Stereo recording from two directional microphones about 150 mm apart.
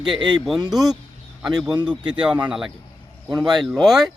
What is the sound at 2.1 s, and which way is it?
Speech, 5° right (ahead or behind).